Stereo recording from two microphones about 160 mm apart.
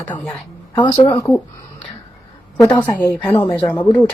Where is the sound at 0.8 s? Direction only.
30° left (ahead or behind).